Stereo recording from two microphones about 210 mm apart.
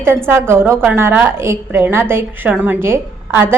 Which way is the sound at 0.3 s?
10° right (ahead or behind).